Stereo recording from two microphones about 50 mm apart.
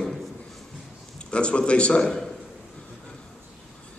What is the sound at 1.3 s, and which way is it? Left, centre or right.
Speech, left.